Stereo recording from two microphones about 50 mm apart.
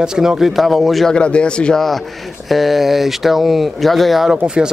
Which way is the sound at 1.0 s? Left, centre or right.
Left.